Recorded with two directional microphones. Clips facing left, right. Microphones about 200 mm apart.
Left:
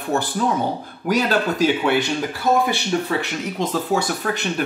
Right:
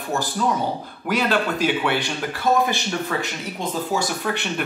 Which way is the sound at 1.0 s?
45° left (ahead or behind).